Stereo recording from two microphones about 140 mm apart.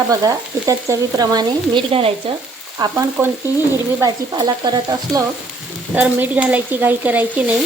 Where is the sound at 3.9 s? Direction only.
25° right (ahead or behind).